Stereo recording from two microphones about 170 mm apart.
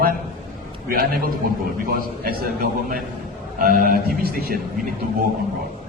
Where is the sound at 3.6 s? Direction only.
60° right (ahead or behind).